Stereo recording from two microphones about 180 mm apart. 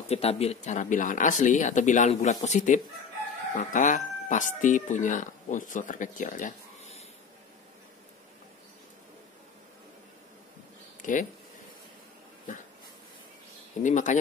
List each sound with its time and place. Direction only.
0.1 s speech: 35° left (ahead or behind)
11.0 s a sound: 45° left (ahead or behind)
13.8 s speech: 45° left (ahead or behind)